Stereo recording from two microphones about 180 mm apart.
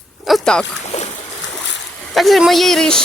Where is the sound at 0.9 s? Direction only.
40° left (ahead or behind).